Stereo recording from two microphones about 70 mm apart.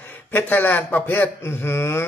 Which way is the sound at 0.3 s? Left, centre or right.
Left.